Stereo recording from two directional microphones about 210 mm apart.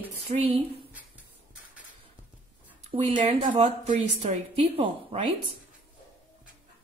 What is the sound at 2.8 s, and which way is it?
A woman's voice, 35° right (ahead or behind).